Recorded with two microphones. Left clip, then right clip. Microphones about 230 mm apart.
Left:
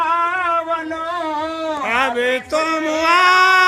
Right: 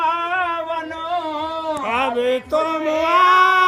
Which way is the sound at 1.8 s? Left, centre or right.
Centre.